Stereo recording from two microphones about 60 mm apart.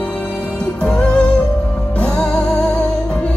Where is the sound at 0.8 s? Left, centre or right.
Centre.